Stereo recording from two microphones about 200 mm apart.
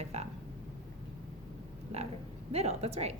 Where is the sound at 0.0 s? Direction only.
30° right (ahead or behind).